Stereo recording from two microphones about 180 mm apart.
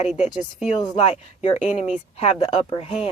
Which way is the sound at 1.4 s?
40° left (ahead or behind).